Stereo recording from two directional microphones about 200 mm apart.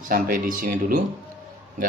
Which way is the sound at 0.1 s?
45° right (ahead or behind).